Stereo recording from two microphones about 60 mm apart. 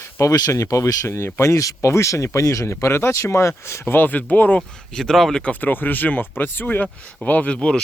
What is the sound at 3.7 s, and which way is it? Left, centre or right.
Speech, left.